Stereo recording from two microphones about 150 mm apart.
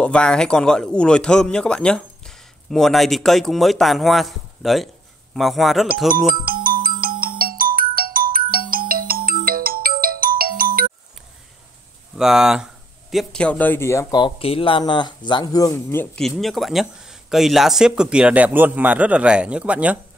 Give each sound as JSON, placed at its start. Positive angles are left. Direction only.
{"t": 0.0, "sound": "speech", "side_deg": 5}
{"t": 6.0, "sound": "music", "side_deg": -75}
{"t": 12.2, "sound": "speech", "side_deg": -5}
{"t": 14.2, "sound": "speech", "side_deg": 35}
{"t": 16.2, "sound": "speech", "side_deg": 0}